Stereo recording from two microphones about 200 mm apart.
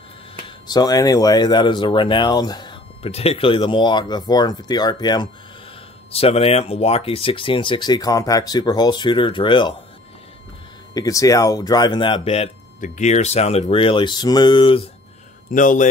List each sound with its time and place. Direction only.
0.7 s speech: 20° left (ahead or behind)
11.0 s speech: 15° left (ahead or behind)
15.5 s speech: 40° left (ahead or behind)